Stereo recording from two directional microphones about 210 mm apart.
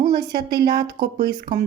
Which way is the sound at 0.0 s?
20° right (ahead or behind).